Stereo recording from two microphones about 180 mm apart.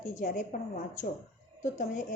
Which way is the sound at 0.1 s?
45° left (ahead or behind).